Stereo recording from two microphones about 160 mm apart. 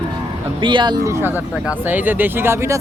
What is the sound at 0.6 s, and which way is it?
Speech, 30° right (ahead or behind).